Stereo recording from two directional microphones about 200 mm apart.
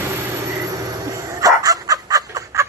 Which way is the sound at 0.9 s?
15° right (ahead or behind).